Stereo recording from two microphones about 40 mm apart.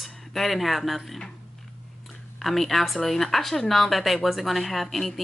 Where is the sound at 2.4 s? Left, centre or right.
Centre.